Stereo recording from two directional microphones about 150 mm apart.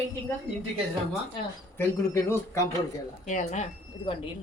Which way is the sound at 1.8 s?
20° left (ahead or behind).